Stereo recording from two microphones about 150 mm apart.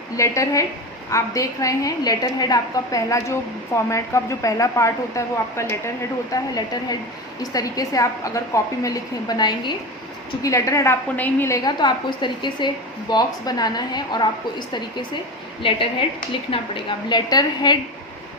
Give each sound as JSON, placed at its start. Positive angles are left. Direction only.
{"t": 0.2, "sound": "a woman's voice", "side_deg": 20}
{"t": 15.6, "sound": "a woman's voice", "side_deg": 35}